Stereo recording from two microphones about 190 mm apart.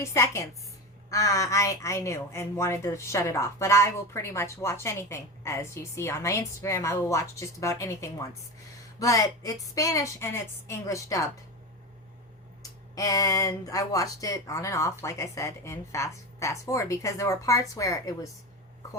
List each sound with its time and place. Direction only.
0.0 s a woman's voice: 15° left (ahead or behind)
13.0 s a woman's voice: 20° left (ahead or behind)